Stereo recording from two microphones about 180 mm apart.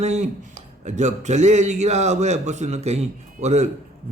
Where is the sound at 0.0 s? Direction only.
40° right (ahead or behind).